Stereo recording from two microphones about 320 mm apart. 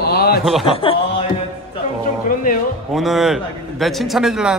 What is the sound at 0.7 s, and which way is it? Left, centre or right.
Speech, centre.